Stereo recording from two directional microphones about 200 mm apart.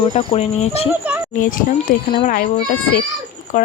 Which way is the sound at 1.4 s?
45° left (ahead or behind).